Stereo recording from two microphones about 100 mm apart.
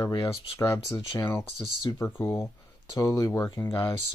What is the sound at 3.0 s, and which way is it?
Speech, 35° left (ahead or behind).